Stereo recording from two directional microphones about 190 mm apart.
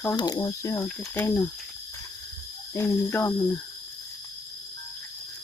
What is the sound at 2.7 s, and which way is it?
Speech, 10° left (ahead or behind).